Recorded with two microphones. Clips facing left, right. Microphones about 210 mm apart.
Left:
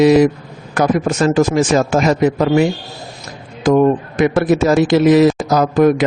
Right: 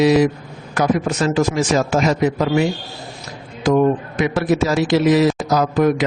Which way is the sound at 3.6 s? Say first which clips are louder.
Left 3 dB; 50° left (ahead or behind).